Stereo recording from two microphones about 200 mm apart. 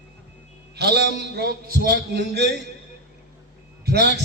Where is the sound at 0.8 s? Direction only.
55° right (ahead or behind).